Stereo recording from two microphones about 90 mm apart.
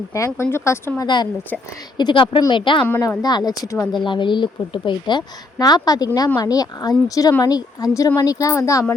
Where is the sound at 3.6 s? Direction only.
35° left (ahead or behind).